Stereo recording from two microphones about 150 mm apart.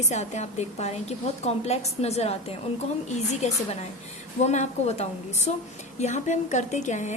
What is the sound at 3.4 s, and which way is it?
A woman's voice, 50° left (ahead or behind).